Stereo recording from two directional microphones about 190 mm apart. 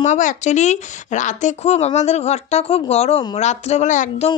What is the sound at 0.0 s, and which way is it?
A woman's voice, 40° left (ahead or behind).